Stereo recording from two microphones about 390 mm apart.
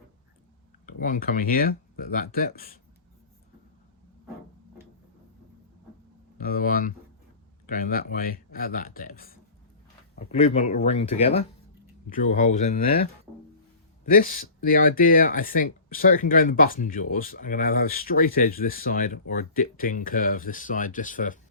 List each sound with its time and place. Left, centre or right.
0.9 s speech: left
6.4 s speech: left
10.3 s speech: centre